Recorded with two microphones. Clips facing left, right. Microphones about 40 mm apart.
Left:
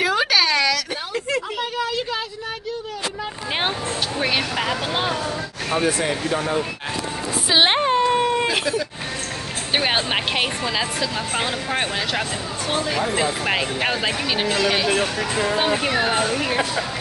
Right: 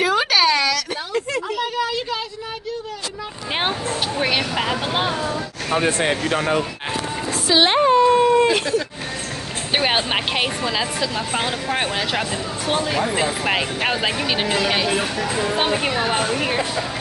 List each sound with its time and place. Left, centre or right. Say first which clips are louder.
0.0 s a sound: right 2 dB; centre
4.2 s speech: right 1 dB; centre
5.9 s speech: right 2 dB; right
7.4 s whimper: right 2 dB; centre
8.5 s a woman's voice: right 3 dB; centre
15.5 s speech: even; centre